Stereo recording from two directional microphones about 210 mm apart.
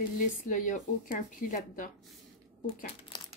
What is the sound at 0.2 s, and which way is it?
Speech, 40° left (ahead or behind).